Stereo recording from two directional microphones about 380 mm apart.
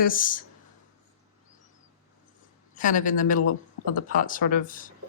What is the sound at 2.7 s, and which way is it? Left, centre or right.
Speech, centre.